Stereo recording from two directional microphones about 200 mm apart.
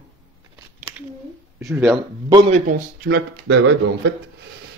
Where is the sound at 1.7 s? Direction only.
10° right (ahead or behind).